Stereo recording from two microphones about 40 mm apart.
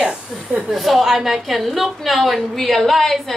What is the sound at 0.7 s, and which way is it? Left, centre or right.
A woman's voice, centre.